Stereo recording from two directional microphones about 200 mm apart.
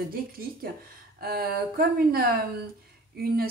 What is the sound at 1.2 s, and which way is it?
A woman's voice, 50° right (ahead or behind).